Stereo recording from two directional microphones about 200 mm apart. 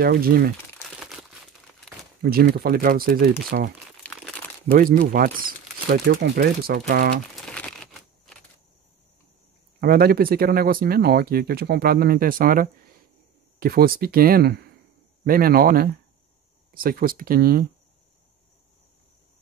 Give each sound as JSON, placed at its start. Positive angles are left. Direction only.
{"t": 0.0, "sound": "speech", "side_deg": -50}
{"t": 0.8, "sound": "crumpling", "side_deg": 0}
{"t": 2.2, "sound": "speech", "side_deg": -50}
{"t": 4.0, "sound": "crumpling", "side_deg": 5}
{"t": 4.7, "sound": "speech", "side_deg": -45}
{"t": 7.3, "sound": "typewriter", "side_deg": 5}
{"t": 9.8, "sound": "speech", "side_deg": -50}